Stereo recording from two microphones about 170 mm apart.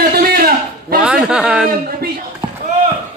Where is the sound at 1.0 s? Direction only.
5° right (ahead or behind).